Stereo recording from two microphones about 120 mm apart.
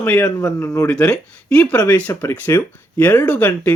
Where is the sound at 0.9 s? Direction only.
10° left (ahead or behind).